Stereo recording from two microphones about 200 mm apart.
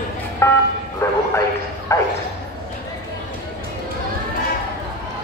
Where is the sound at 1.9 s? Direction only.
15° left (ahead or behind).